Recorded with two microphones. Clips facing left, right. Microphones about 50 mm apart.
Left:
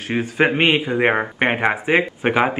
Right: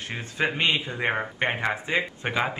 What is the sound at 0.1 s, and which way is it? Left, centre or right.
A man's voice, left.